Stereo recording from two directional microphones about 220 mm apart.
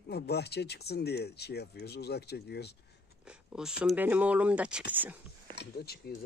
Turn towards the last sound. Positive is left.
turn(degrees=45)  # may be behind; listen again after turning